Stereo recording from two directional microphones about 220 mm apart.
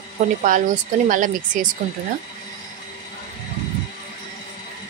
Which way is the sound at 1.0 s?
35° right (ahead or behind).